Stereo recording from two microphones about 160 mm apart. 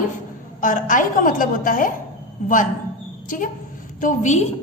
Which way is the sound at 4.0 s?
50° left (ahead or behind).